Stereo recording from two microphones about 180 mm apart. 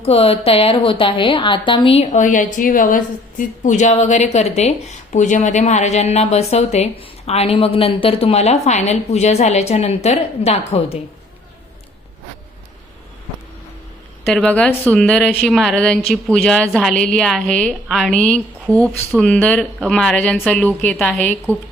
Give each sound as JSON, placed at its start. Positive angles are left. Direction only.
{"t": 0.0, "sound": "a woman's voice", "side_deg": 35}
{"t": 14.3, "sound": "a woman's voice", "side_deg": 5}